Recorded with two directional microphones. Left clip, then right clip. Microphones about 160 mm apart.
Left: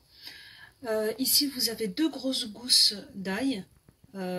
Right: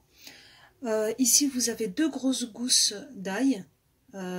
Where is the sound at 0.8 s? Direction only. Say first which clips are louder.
Right 3 dB; 55° right (ahead or behind).